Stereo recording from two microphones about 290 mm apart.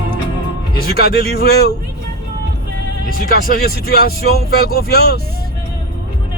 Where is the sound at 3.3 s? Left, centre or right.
Left.